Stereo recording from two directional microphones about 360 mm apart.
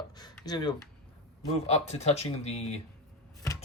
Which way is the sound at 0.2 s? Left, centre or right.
Centre.